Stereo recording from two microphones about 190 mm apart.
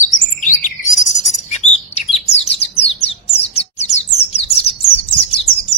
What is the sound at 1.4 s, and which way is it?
Bird, 35° left (ahead or behind).